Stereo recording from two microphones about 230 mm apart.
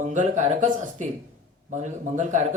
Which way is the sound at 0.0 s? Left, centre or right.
Right.